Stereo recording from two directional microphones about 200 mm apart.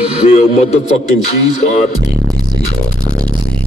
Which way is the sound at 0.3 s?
35° left (ahead or behind).